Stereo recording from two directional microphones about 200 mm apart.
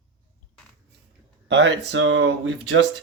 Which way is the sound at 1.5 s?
60° right (ahead or behind).